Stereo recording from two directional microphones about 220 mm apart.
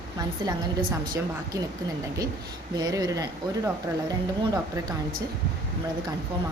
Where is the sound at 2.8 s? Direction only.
15° right (ahead or behind).